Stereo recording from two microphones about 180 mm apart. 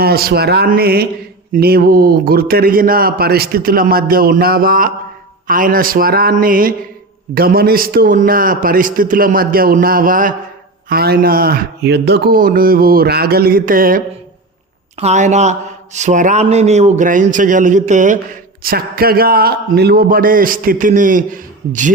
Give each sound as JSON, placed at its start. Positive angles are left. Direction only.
{"t": 0.0, "sound": "a man's voice", "side_deg": -60}
{"t": 14.9, "sound": "a man's voice", "side_deg": -40}
{"t": 18.6, "sound": "a man's voice", "side_deg": -55}